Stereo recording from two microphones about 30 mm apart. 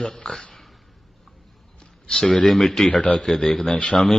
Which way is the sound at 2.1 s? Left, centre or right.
Centre.